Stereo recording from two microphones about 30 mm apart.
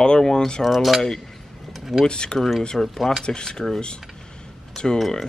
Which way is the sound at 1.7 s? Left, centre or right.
Centre.